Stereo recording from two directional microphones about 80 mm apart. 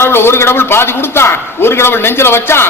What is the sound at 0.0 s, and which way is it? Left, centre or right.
A man's voice, left.